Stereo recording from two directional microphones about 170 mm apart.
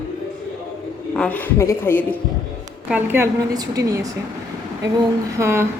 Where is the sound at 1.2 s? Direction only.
10° left (ahead or behind).